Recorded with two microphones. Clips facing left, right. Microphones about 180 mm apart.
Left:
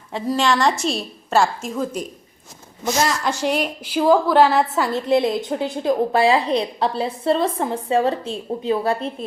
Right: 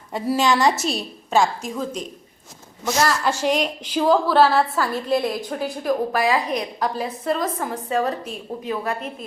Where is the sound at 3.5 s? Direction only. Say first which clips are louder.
Even; 5° left (ahead or behind).